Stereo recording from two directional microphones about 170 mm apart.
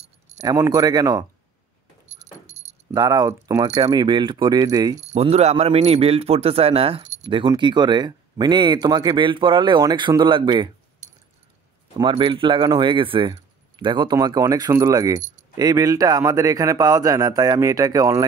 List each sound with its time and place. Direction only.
0.4 s speech: 20° right (ahead or behind)
2.0 s a sound: 40° right (ahead or behind)
2.9 s speech: 25° right (ahead or behind)
4.9 s speech: 40° right (ahead or behind)
12.0 s speech: 30° right (ahead or behind)